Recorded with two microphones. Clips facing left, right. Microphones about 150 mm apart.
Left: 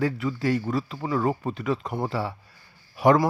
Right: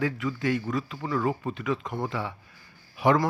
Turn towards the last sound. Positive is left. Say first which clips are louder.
# left 4 dB
turn(degrees=40)  # may be behind; listen again after turning